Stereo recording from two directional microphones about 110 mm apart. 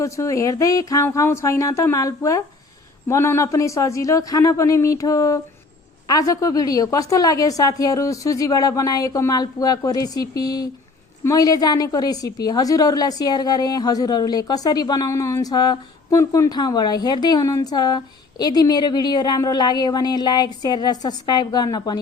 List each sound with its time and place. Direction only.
0.0 s a woman's voice: 30° left (ahead or behind)